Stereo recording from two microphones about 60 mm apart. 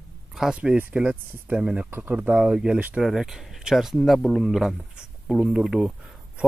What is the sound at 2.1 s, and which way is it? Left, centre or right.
Speech, right.